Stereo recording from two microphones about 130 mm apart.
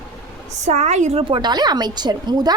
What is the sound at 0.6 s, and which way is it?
Speech, 60° right (ahead or behind).